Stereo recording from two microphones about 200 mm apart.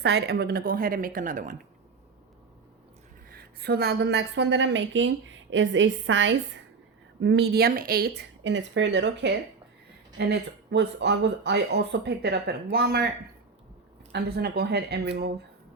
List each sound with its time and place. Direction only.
0.0 s a woman's voice: 55° right (ahead or behind); by 1.5 s 40° right (ahead or behind)
3.2 s a woman's voice: 50° right (ahead or behind)
14.1 s a woman's voice: 50° right (ahead or behind)